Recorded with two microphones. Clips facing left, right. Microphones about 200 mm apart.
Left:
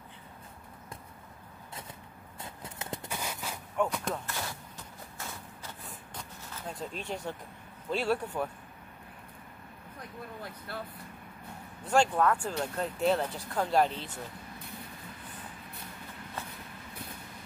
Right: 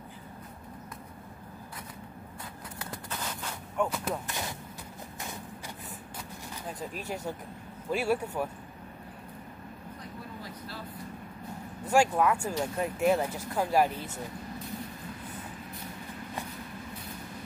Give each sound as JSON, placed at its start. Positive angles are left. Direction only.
{"t": 3.1, "sound": "walk", "side_deg": 10}
{"t": 3.7, "sound": "speech", "side_deg": 0}
{"t": 4.3, "sound": "a sound", "side_deg": -15}
{"t": 6.1, "sound": "vehicle", "side_deg": -5}
{"t": 7.9, "sound": "speech", "side_deg": -10}
{"t": 11.9, "sound": "speech", "side_deg": -10}